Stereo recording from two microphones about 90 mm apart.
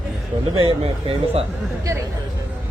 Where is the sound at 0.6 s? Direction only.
90° right.